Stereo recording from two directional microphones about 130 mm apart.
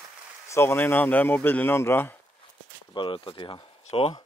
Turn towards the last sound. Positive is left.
turn(degrees=35)  # may be behind; listen again after turning